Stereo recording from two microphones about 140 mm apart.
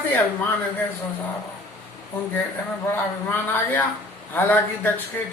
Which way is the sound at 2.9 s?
15° left (ahead or behind).